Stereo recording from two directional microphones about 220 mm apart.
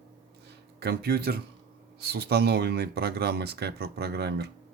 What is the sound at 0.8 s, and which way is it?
Speech, 45° right (ahead or behind).